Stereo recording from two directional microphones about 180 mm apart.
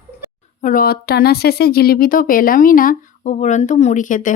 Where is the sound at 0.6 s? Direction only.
50° left (ahead or behind).